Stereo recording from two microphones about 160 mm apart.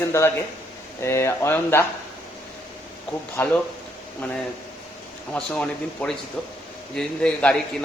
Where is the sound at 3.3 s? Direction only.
15° left (ahead or behind).